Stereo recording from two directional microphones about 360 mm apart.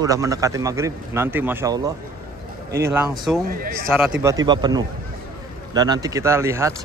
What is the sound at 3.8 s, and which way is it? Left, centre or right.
Speech, centre.